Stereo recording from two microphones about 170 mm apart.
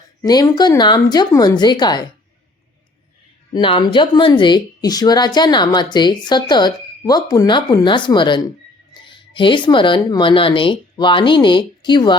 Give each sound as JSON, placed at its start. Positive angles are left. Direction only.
{"t": 0.2, "sound": "a woman's voice", "side_deg": 20}
{"t": 3.5, "sound": "a woman's voice", "side_deg": 30}